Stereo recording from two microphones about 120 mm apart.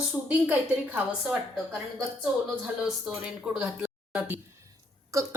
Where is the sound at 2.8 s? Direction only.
5° right (ahead or behind).